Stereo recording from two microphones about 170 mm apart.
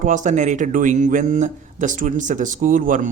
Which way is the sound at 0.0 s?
45° right (ahead or behind).